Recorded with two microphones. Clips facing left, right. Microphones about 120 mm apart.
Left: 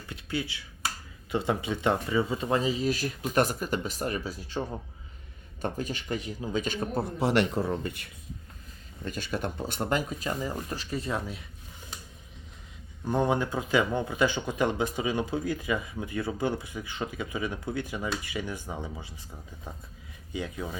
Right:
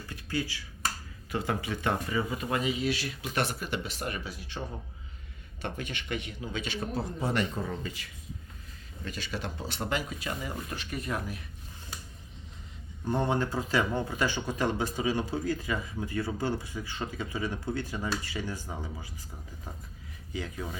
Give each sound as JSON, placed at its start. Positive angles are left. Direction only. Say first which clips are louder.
{"t": 0.1, "sound": "finger snapping", "louder": "left 1 dB", "side_deg": 20}
{"t": 1.3, "sound": "speech", "louder": "left 3 dB", "side_deg": 25}
{"t": 5.6, "sound": "speech", "louder": "left 4 dB", "side_deg": 40}
{"t": 7.7, "sound": "speech", "louder": "left 5 dB", "side_deg": 55}
{"t": 9.0, "sound": "speech", "louder": "left 4 dB", "side_deg": 50}
{"t": 13.1, "sound": "speech", "louder": "left 2 dB", "side_deg": 15}
{"t": 20.3, "sound": "speech", "louder": "left 2 dB", "side_deg": 20}